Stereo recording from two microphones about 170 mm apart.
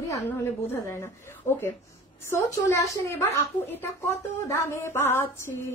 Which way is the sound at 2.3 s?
15° left (ahead or behind).